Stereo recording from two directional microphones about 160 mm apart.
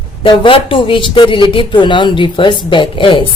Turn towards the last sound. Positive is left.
turn(degrees=30)  # may be behind; listen again after turning